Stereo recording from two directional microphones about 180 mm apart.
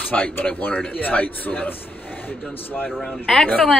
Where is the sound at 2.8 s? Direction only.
Centre (ahead or behind).